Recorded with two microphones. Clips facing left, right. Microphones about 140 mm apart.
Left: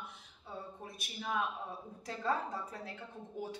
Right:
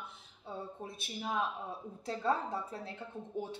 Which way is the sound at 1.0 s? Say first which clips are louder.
Right 1 dB; 25° right (ahead or behind).